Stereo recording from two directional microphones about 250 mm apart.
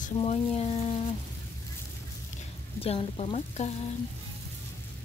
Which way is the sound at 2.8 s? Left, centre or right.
Left.